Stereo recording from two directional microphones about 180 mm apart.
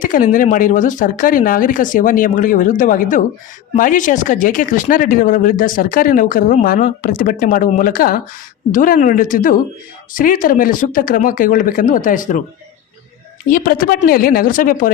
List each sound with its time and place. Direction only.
0.0 s speech: 50° left (ahead or behind)
13.5 s speech: 55° left (ahead or behind)